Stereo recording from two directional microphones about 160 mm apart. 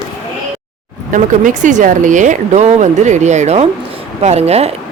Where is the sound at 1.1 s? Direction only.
55° right (ahead or behind).